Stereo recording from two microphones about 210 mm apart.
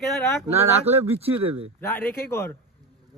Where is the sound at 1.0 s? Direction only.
30° right (ahead or behind).